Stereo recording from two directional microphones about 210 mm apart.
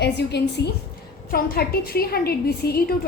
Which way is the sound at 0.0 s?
55° left (ahead or behind).